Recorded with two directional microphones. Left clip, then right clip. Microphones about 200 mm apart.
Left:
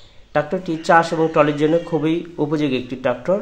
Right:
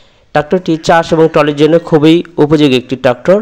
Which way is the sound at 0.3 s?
40° right (ahead or behind).